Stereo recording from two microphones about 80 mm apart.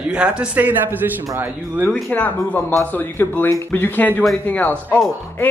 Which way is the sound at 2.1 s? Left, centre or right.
Centre.